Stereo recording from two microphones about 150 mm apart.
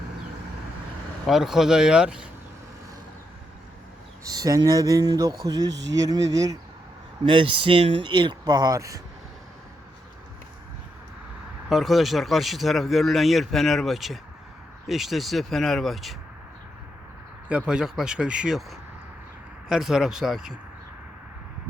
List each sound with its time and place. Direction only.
1.3 s speech: 5° right (ahead or behind)
4.2 s speech: 25° right (ahead or behind)
7.3 s speech: 35° right (ahead or behind)
11.7 s speech: centre (ahead or behind)
17.5 s speech: 5° right (ahead or behind)
19.6 s speech: 5° right (ahead or behind)